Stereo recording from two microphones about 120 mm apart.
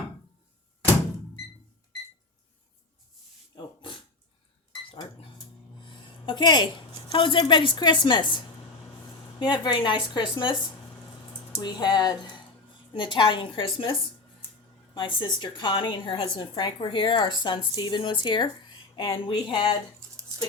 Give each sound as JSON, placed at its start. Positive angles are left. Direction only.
{"t": 3.5, "sound": "a sound", "side_deg": 45}
{"t": 5.8, "sound": "speech", "side_deg": 45}
{"t": 9.4, "sound": "a woman's voice", "side_deg": 40}
{"t": 11.6, "sound": "a woman's voice", "side_deg": 35}
{"t": 14.9, "sound": "a woman's voice", "side_deg": 45}